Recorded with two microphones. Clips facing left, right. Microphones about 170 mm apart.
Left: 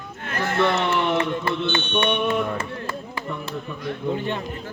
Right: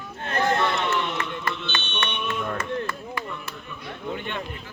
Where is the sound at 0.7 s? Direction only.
40° left (ahead or behind).